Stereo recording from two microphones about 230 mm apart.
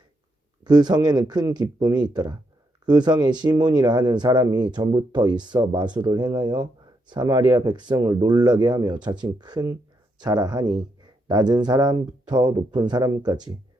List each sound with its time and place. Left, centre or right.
0.6 s speech: centre